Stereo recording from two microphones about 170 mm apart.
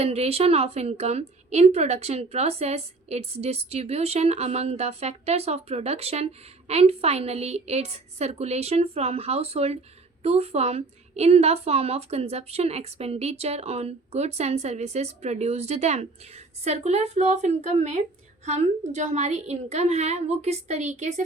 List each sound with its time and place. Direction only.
0.0 s a woman's voice: 35° right (ahead or behind)